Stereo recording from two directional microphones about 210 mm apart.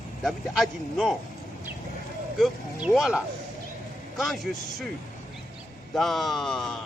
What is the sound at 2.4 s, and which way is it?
A man's voice, centre (ahead or behind).